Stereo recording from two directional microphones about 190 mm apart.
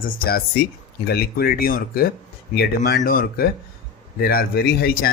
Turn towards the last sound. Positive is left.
turn(degrees=55)  # may be behind; listen again after turning